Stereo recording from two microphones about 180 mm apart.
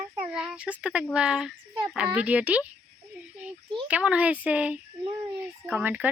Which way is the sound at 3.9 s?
5° right (ahead or behind).